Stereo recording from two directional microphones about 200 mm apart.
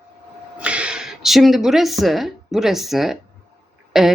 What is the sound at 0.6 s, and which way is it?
A woman's voice, 5° right (ahead or behind).